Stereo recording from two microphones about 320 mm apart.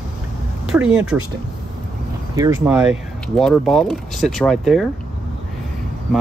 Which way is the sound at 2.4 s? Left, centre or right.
Centre.